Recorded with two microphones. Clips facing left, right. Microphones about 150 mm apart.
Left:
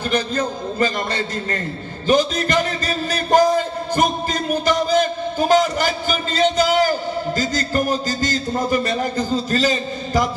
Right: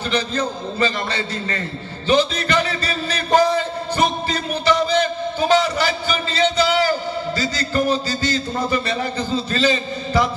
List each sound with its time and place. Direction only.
0.1 s a man's voice: 50° left (ahead or behind)